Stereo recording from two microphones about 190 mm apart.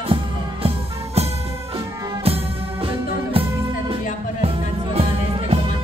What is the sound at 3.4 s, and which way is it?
Music, 30° right (ahead or behind).